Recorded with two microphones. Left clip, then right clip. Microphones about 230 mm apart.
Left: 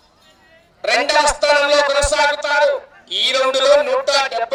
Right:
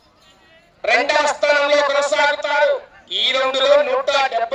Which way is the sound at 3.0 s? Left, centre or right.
Left.